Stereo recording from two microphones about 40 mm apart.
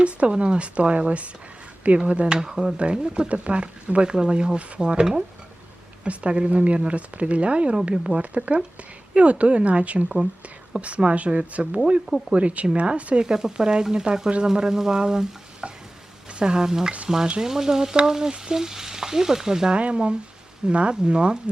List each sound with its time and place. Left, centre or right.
0.0 s speech: right
2.4 s frying: centre
2.7 s speech: right
6.1 s speech: right
13.2 s frying: centre
13.8 s speech: right
14.4 s frying: centre
19.7 s speech: right